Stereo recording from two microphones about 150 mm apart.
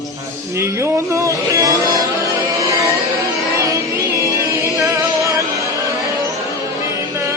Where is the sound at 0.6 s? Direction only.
20° right (ahead or behind).